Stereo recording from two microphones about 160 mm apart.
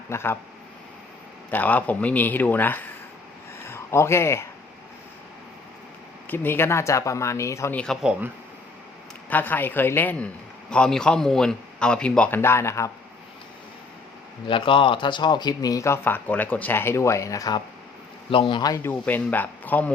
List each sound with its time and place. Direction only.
0.1 s speech: 15° left (ahead or behind)
1.5 s speech: 10° left (ahead or behind)
3.6 s a sound: 15° left (ahead or behind)
6.2 s speech: 15° left (ahead or behind)
7.8 s a man's voice: 5° left (ahead or behind)
9.3 s a man's voice: 10° left (ahead or behind)
14.4 s speech: 30° left (ahead or behind)
18.3 s speech: 35° left (ahead or behind); by 19.9 s 10° left (ahead or behind)